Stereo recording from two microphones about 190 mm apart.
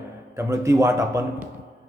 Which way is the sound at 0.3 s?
15° right (ahead or behind).